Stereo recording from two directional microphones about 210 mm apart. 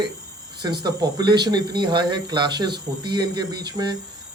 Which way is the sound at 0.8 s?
20° right (ahead or behind).